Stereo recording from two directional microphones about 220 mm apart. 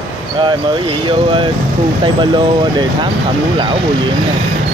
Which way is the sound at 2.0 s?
20° right (ahead or behind).